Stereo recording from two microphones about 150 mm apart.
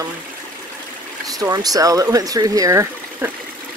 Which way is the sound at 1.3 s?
25° right (ahead or behind).